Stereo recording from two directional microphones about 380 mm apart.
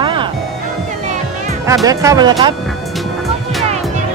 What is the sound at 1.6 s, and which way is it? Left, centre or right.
Speech, centre.